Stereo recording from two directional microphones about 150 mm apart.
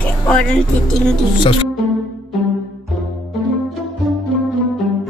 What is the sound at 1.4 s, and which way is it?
Speech, 35° left (ahead or behind).